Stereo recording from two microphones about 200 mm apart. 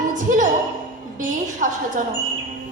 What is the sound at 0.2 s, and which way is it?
Music, 40° right (ahead or behind).